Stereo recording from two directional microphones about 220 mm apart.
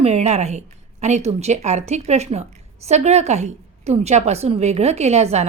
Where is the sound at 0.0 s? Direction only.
30° right (ahead or behind).